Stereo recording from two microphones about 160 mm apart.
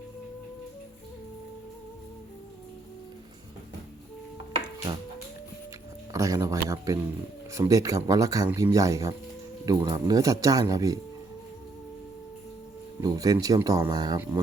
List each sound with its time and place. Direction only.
6.1 s speech: 20° right (ahead or behind)
13.0 s speech: 20° right (ahead or behind)